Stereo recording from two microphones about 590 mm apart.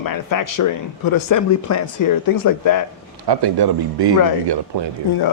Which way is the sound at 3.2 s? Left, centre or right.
Right.